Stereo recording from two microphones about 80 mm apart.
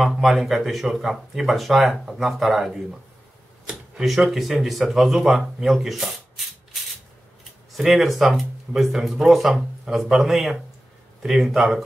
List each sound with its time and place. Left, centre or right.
0.0 s speech: centre
7.7 s speech: centre